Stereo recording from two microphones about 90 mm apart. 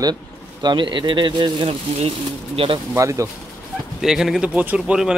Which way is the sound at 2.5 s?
80° right.